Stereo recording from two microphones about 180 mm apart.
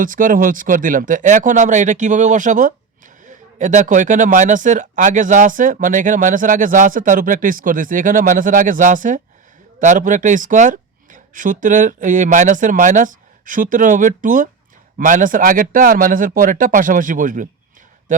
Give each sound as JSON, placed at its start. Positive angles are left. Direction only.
{"t": 0.0, "sound": "speech", "side_deg": -50}